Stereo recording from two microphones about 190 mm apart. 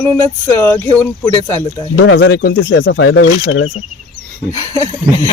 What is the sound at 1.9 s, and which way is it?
Speech, 70° left (ahead or behind).